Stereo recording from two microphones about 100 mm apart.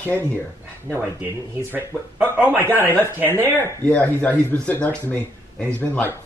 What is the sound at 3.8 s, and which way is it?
Speech, 15° left (ahead or behind).